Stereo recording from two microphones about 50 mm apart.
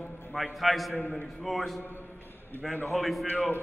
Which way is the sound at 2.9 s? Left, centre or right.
Centre.